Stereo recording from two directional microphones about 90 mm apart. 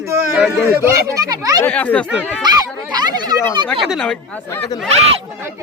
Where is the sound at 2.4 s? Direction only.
50° right (ahead or behind).